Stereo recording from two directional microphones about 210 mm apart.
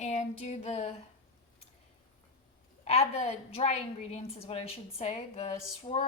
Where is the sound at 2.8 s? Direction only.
30° left (ahead or behind).